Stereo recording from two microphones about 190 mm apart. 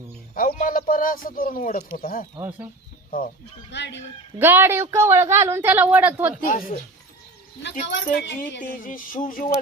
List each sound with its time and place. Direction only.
0.3 s speech: 45° left (ahead or behind)
3.7 s speech: 65° left (ahead or behind)
4.4 s speech: 10° right (ahead or behind)
7.6 s speech: 65° left (ahead or behind)
8.6 s speech: 45° left (ahead or behind)